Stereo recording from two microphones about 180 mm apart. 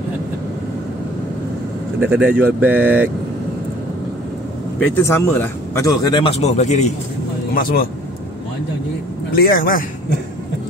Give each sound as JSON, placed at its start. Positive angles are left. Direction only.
{"t": 2.0, "sound": "speech", "side_deg": -10}
{"t": 4.7, "sound": "a man's voice", "side_deg": 10}
{"t": 7.5, "sound": "a man's voice", "side_deg": 50}
{"t": 9.3, "sound": "a man's voice", "side_deg": 55}